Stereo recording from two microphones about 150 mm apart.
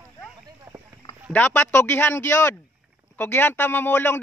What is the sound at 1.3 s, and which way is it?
A man's voice, 10° left (ahead or behind).